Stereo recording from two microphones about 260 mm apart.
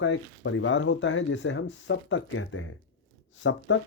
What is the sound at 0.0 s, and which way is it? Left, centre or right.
Speech, left.